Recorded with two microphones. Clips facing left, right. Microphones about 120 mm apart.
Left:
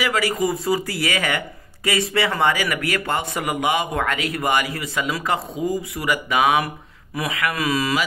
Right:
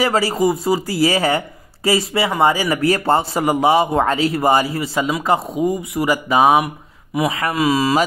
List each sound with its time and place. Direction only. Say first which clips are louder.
0.0 s a man's voice: right 5 dB; 35° right (ahead or behind)